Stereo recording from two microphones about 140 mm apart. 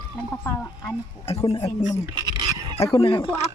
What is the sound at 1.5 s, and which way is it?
Speech, 45° left (ahead or behind).